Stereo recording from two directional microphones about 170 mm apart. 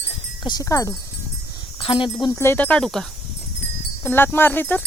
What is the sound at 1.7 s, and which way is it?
Speech, 30° left (ahead or behind).